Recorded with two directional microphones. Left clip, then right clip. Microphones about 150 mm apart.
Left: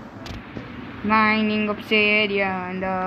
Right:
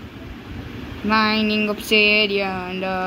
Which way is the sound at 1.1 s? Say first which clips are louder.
Even; 35° right (ahead or behind).